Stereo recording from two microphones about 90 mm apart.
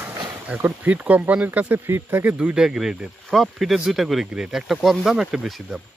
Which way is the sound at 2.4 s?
10° right (ahead or behind).